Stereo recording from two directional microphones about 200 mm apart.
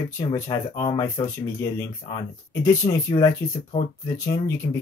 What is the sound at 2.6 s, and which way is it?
Speech, 15° left (ahead or behind).